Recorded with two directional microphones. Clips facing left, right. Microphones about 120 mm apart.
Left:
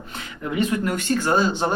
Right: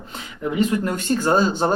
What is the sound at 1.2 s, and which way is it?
Speech, 35° right (ahead or behind).